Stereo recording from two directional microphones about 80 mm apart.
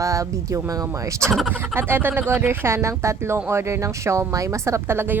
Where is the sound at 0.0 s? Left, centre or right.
Right.